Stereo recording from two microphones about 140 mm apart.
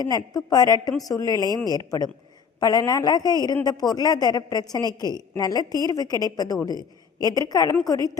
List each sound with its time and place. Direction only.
0.1 s a woman's voice: 25° left (ahead or behind)